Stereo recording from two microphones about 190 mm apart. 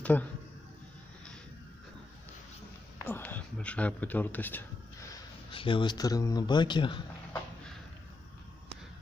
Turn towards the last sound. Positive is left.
turn(degrees=25)  # may be behind; listen again after turning